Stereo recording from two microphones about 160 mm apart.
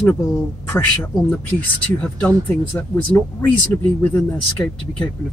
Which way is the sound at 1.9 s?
5° left (ahead or behind).